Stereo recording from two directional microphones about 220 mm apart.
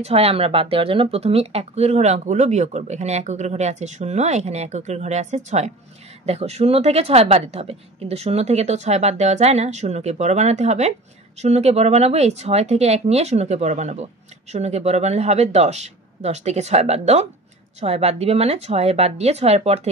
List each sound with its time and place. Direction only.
0.0 s a woman's voice: 25° right (ahead or behind)